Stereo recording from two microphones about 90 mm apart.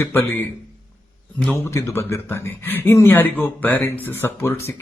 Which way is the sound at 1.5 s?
25° left (ahead or behind).